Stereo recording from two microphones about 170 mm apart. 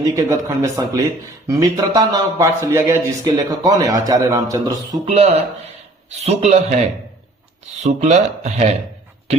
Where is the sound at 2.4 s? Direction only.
15° right (ahead or behind).